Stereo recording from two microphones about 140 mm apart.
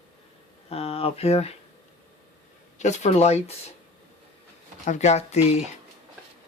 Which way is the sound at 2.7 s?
55° left (ahead or behind).